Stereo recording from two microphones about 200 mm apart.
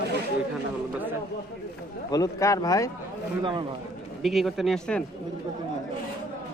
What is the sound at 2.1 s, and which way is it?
Speech, 15° left (ahead or behind).